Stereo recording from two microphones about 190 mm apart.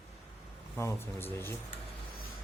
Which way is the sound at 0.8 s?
15° left (ahead or behind).